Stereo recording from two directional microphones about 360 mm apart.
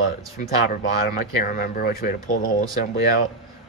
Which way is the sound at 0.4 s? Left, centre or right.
Left.